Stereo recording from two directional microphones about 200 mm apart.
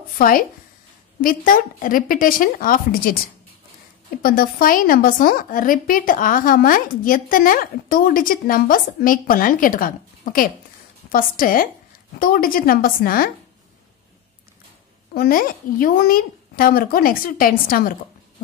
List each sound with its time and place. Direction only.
0.2 s a woman's voice: 45° left (ahead or behind)
4.2 s a woman's voice: 45° left (ahead or behind)
15.1 s a woman's voice: 45° left (ahead or behind)